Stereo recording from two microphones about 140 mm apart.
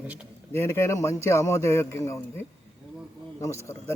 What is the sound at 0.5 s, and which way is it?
A man's voice, 20° left (ahead or behind).